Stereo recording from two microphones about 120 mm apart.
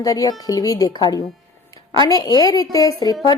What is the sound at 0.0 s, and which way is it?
A woman's voice, 30° left (ahead or behind).